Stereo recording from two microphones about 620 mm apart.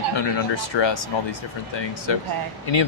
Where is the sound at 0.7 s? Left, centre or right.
Left.